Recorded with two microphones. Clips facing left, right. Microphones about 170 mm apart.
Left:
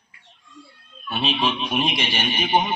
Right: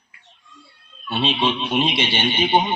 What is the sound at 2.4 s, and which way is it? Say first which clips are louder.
Speech: right 2 dB; 25° right (ahead or behind).